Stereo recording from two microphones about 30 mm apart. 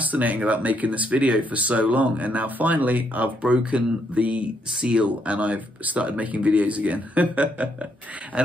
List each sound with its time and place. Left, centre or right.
0.1 s speech: right
3.4 s speech: right